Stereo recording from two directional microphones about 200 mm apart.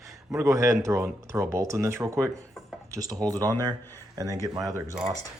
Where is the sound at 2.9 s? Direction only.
15° right (ahead or behind).